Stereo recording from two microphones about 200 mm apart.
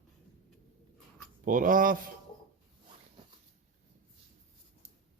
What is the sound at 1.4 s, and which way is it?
Speech, 40° right (ahead or behind).